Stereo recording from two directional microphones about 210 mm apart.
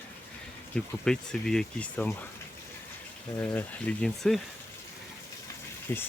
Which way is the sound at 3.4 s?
5° left (ahead or behind).